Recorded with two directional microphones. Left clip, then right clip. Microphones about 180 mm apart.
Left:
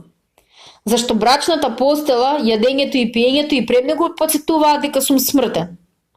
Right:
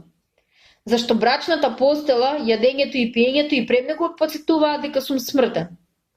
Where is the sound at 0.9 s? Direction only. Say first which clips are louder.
Left 4 dB; 30° left (ahead or behind).